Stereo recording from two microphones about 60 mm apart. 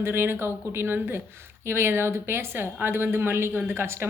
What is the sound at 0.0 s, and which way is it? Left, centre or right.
A woman's voice, right.